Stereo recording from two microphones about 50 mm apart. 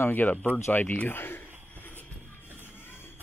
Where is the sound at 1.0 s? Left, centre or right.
Left.